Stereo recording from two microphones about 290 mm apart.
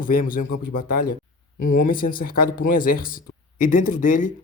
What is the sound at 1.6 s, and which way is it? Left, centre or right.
Speech, left.